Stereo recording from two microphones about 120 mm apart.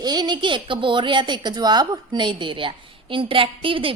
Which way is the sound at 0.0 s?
35° right (ahead or behind).